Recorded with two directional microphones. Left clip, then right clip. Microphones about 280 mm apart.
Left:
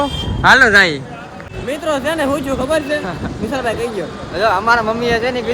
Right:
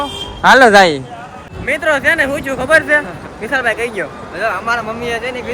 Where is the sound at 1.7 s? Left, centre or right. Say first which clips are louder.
Right 5 dB; centre.